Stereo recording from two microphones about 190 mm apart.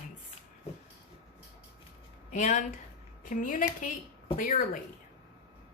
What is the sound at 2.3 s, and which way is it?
Speech, 40° left (ahead or behind).